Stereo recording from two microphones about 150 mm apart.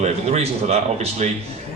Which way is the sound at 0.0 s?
45° right (ahead or behind).